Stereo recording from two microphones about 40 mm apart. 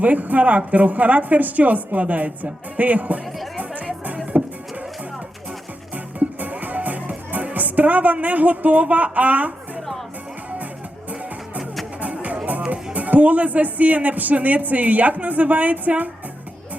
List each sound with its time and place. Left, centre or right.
0.0 s speech: right
4.3 s music: right
6.1 s music: right
9.1 s speech: right
11.9 s music: right
12.6 s speech: right